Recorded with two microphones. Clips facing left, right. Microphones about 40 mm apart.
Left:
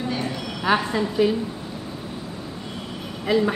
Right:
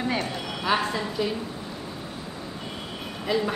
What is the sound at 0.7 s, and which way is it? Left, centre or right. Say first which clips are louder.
Speech: left 4 dB; centre.